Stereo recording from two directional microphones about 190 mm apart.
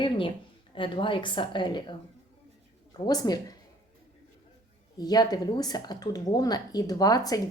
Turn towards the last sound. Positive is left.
turn(degrees=20)  # may be behind; listen again after turning